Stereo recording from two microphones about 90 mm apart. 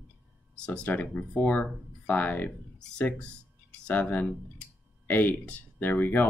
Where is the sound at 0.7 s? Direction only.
15° left (ahead or behind).